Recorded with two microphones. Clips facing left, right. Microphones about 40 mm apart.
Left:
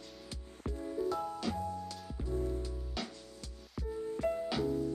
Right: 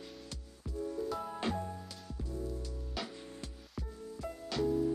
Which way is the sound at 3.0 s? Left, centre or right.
Centre.